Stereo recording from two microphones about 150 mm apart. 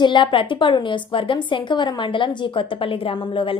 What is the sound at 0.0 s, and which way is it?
Speech, 30° left (ahead or behind).